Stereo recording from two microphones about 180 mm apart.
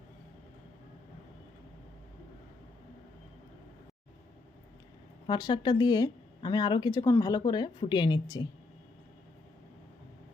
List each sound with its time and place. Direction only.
5.2 s speech: 25° left (ahead or behind)